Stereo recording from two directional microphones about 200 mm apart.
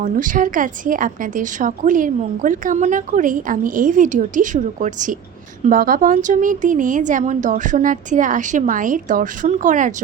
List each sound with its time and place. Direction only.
0.0 s a woman's voice: 40° right (ahead or behind)